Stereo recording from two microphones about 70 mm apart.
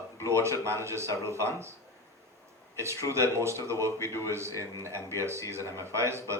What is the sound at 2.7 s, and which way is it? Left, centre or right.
A man's voice, right.